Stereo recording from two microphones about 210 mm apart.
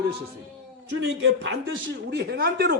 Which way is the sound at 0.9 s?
60° right (ahead or behind).